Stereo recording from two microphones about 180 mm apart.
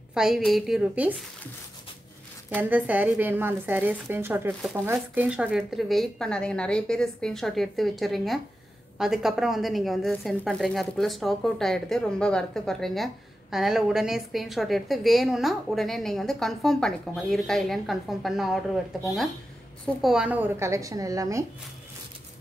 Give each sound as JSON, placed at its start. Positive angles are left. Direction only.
{"t": 0.1, "sound": "a woman's voice", "side_deg": 0}
{"t": 2.5, "sound": "a woman's voice", "side_deg": -10}